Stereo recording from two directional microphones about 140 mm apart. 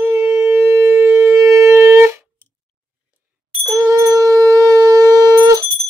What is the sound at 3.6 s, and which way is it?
Shofar, 20° right (ahead or behind).